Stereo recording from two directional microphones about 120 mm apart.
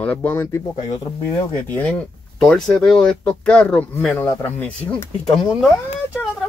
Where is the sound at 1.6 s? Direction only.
10° left (ahead or behind).